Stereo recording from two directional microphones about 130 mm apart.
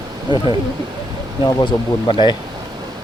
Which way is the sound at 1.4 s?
35° left (ahead or behind).